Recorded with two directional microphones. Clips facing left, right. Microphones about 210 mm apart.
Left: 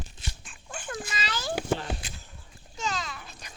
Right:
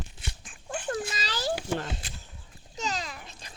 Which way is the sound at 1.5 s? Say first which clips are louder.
Left 3 dB; 55° left (ahead or behind).